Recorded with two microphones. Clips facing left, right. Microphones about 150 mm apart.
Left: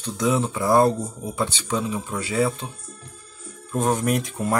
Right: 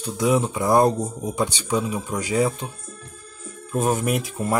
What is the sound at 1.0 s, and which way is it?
Speech, 40° right (ahead or behind).